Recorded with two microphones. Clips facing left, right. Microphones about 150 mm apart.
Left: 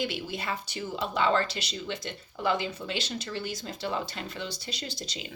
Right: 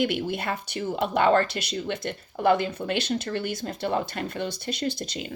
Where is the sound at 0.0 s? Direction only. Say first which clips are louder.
Right 7 dB; 55° right (ahead or behind).